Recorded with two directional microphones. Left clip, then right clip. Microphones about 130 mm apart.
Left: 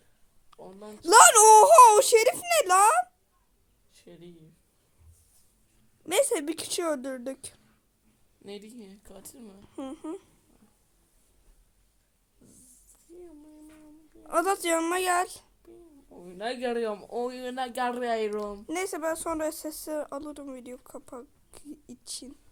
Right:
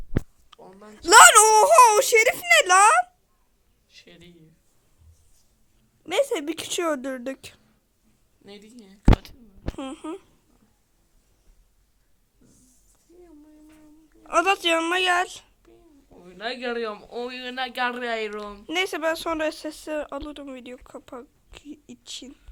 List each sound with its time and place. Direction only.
0.5 s a sound: 5° left (ahead or behind)
0.9 s a woman's voice: 10° left (ahead or behind)
1.5 s speech: 20° left (ahead or behind)
3.9 s a sound: 60° left (ahead or behind)
6.0 s a woman's voice: 15° left (ahead or behind)
6.3 s a woman's voice: 10° right (ahead or behind)
8.4 s speech: 45° left (ahead or behind)
9.7 s a woman's voice: 10° left (ahead or behind)
12.4 s a sound: 60° left (ahead or behind)
14.3 s a woman's voice: 15° left (ahead or behind)
16.2 s speech: 55° left (ahead or behind)
18.6 s speech: 5° left (ahead or behind)